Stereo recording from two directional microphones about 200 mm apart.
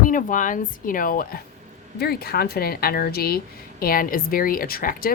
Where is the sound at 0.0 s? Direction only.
40° left (ahead or behind).